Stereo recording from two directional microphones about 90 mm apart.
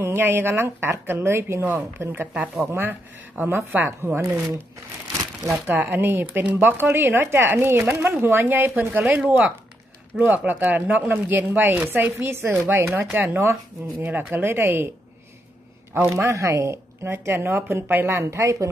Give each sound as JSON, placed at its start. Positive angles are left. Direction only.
{"t": 0.0, "sound": "a woman's voice", "side_deg": -25}
{"t": 5.7, "sound": "a woman's voice", "side_deg": -20}
{"t": 16.2, "sound": "speech", "side_deg": -35}